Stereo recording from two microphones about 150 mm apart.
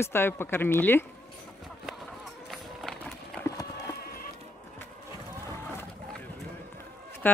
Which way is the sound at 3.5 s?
20° left (ahead or behind).